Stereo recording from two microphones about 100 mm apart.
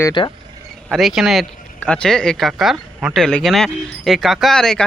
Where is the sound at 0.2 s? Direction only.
60° left (ahead or behind).